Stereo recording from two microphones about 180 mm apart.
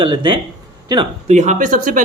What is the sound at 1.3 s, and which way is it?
Speech, 40° right (ahead or behind).